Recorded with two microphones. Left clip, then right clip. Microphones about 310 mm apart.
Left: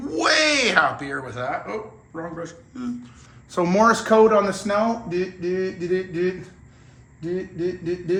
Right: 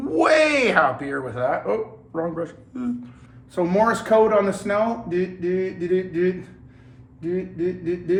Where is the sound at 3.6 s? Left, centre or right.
Centre.